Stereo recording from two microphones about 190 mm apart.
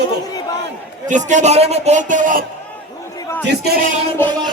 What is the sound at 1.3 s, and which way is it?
A man's voice, 35° right (ahead or behind).